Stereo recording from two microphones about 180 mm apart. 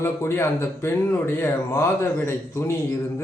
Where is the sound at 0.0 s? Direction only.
15° left (ahead or behind).